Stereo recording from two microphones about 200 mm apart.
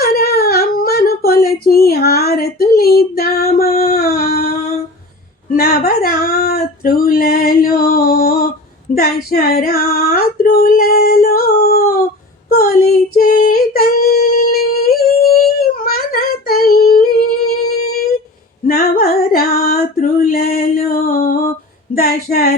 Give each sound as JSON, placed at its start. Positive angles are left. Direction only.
{"t": 0.0, "sound": "a sound", "side_deg": 50}
{"t": 3.8, "sound": "humming", "side_deg": 50}
{"t": 5.5, "sound": "female singing", "side_deg": 50}
{"t": 15.5, "sound": "singing", "side_deg": 50}
{"t": 18.6, "sound": "female singing", "side_deg": 45}
{"t": 22.0, "sound": "a sound", "side_deg": 50}